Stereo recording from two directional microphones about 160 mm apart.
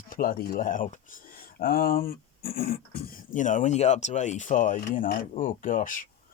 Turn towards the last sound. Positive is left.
turn(degrees=55)  # may be behind; listen again after turning